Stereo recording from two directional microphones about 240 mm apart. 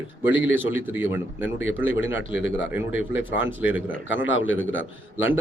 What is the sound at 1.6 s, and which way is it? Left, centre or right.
Speech, left.